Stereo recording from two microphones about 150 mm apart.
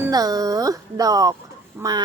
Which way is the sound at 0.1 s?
25° right (ahead or behind).